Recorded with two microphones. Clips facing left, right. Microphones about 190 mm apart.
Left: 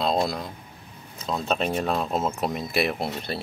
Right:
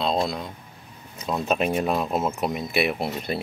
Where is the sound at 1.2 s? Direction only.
5° right (ahead or behind).